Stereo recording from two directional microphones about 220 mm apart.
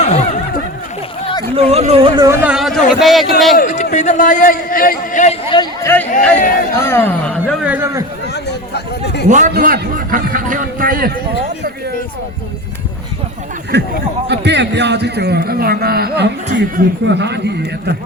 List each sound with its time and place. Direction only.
0.0 s snicker: 30° left (ahead or behind)
1.5 s a man's voice: 30° right (ahead or behind); by 3.6 s centre (ahead or behind)
3.6 s run: 35° left (ahead or behind)
3.9 s a man's voice: 35° left (ahead or behind)
5.8 s speech: 10° left (ahead or behind)
6.3 s a man's voice: 40° left (ahead or behind)
6.7 s speech: 10° left (ahead or behind)
7.6 s speech: 10° right (ahead or behind)
8.3 s a sound: 50° left (ahead or behind)
9.3 s a man's voice: 40° right (ahead or behind)
14.3 s a man's voice: 50° right (ahead or behind)